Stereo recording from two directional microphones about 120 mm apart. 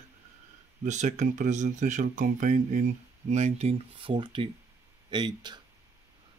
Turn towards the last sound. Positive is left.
turn(degrees=-35)  # may be behind; listen again after turning